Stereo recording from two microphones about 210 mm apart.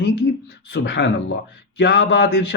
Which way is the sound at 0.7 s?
60° left (ahead or behind).